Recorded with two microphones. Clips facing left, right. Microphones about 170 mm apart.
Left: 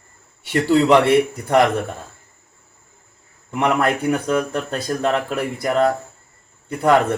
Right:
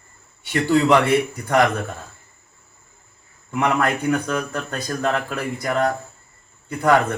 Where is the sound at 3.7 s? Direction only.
20° left (ahead or behind).